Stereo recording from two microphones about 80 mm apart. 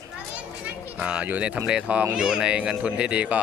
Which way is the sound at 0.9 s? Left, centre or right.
Centre.